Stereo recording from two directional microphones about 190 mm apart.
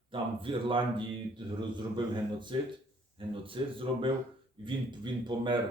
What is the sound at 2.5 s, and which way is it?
Speech, 25° right (ahead or behind).